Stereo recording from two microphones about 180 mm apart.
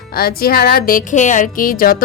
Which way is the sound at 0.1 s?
55° left (ahead or behind).